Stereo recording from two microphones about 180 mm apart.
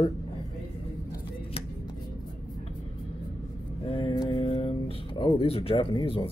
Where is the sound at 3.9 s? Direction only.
30° left (ahead or behind).